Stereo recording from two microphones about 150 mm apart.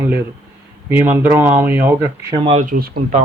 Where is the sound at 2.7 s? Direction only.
90° right.